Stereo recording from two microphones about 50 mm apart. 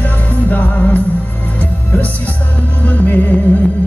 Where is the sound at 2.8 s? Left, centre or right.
Left.